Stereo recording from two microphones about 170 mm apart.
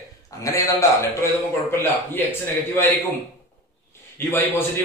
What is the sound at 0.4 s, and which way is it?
Speech, 20° left (ahead or behind).